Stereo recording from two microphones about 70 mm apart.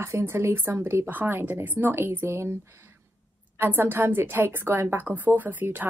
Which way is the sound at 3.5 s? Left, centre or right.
Right.